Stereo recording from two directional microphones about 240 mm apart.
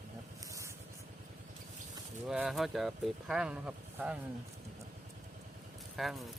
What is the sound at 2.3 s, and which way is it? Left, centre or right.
Speech, centre.